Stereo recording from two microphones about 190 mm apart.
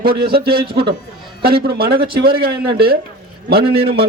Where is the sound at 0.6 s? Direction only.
25° right (ahead or behind).